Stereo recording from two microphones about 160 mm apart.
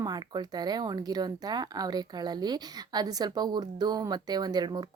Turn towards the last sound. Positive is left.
turn(degrees=-25)  # may be behind; listen again after turning